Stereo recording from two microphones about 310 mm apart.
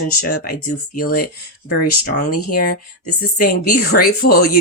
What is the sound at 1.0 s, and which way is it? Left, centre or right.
Speech, left.